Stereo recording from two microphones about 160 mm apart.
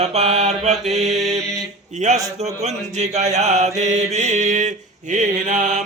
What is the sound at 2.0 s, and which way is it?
Mantra, 50° right (ahead or behind).